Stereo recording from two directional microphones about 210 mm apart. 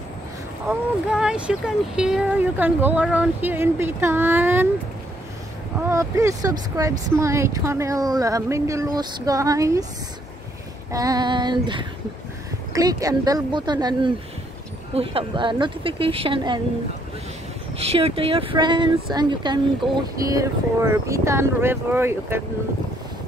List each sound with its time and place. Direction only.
0.7 s speech: 5° right (ahead or behind)
5.8 s speech: 15° right (ahead or behind)
10.9 s speech: 15° right (ahead or behind)
17.7 s speech: 30° right (ahead or behind); by 22.4 s 10° right (ahead or behind)